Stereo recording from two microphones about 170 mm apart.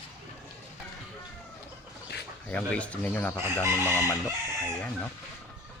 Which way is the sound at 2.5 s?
10° left (ahead or behind).